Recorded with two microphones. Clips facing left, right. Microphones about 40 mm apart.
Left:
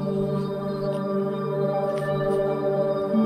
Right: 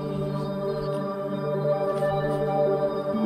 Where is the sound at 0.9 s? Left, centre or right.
Centre.